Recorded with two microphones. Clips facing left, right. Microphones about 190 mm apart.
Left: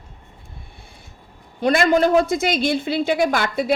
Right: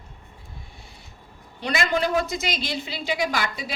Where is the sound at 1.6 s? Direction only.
50° left (ahead or behind).